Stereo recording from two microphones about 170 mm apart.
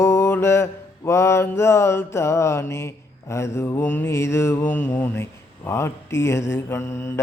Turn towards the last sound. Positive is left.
turn(degrees=15)  # may be behind; listen again after turning